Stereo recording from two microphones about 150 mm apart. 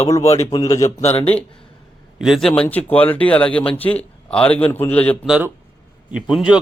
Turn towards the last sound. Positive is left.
turn(degrees=-5)  # may be behind; listen again after turning